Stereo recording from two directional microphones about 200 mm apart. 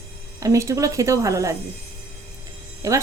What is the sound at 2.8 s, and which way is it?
Speech, 15° right (ahead or behind).